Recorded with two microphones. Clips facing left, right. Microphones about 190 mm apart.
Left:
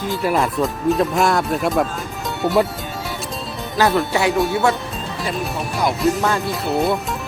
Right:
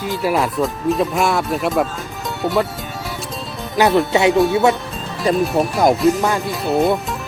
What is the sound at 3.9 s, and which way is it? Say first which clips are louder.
Speech: right 4 dB; 20° right (ahead or behind).